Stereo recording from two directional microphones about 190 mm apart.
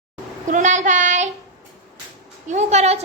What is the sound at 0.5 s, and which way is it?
Child singing, 40° right (ahead or behind).